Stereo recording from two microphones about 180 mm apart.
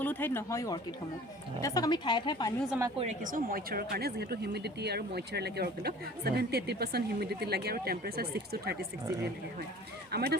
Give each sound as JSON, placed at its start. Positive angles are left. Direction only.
{"t": 0.0, "sound": "a woman's voice", "side_deg": 10}
{"t": 3.0, "sound": "speech", "side_deg": -45}
{"t": 10.1, "sound": "speech", "side_deg": -65}